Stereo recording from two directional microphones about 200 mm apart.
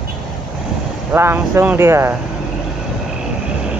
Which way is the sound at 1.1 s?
10° right (ahead or behind).